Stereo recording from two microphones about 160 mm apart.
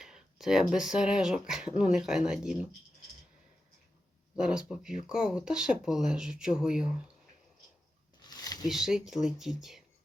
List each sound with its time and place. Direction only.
0.0 s speech: centre (ahead or behind)
4.4 s speech: 5° right (ahead or behind)
8.2 s a sound: 25° left (ahead or behind)
8.6 s speech: 5° right (ahead or behind)